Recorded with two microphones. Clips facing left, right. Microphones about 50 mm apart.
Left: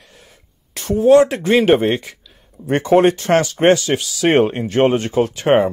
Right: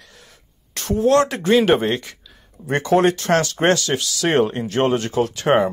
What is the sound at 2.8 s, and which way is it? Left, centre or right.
Speech, left.